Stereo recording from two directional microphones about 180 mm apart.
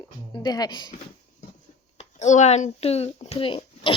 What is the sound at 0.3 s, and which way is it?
Speech, 20° left (ahead or behind).